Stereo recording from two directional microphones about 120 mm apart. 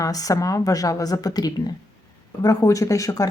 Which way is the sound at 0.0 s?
30° left (ahead or behind).